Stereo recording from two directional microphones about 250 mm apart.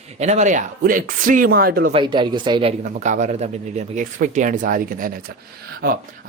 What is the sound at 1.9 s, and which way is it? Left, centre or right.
Speech, centre.